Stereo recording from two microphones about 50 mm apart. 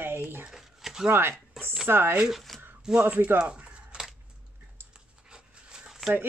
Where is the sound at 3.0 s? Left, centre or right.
Right.